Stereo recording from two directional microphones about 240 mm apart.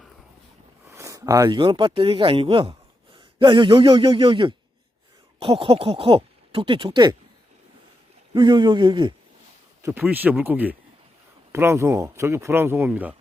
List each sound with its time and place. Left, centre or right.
0.9 s speech: centre
8.3 s speech: centre
9.8 s speech: centre